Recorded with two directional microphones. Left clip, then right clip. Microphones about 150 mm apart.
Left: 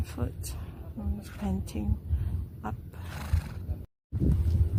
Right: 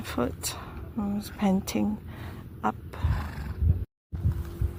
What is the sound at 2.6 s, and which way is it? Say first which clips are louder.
Wild animals: right 11 dB; 20° right (ahead or behind).